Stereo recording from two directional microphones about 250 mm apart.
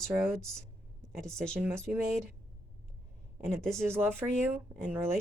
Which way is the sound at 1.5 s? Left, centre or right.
Centre.